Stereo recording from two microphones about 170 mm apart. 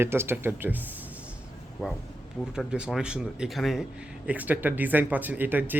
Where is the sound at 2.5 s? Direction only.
5° right (ahead or behind).